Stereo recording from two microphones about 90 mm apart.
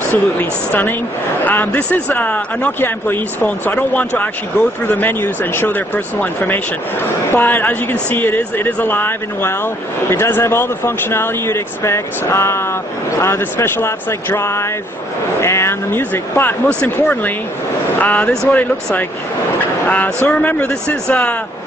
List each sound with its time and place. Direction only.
0.1 s speech: 20° left (ahead or behind)